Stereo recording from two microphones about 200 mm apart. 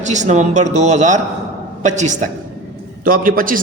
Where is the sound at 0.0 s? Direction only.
35° right (ahead or behind).